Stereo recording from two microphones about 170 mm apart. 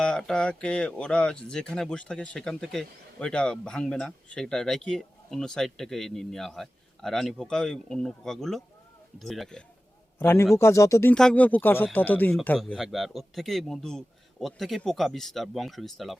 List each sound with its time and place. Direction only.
0.0 s speech: 5° left (ahead or behind)
10.2 s speech: 15° left (ahead or behind)
11.1 s speech: 5° left (ahead or behind)
12.5 s speech: centre (ahead or behind)